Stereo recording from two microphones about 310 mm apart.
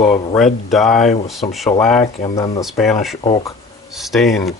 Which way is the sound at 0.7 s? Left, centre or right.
Centre.